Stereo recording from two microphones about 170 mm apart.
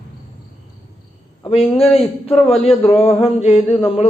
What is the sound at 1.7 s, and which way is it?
A man's voice, 35° left (ahead or behind).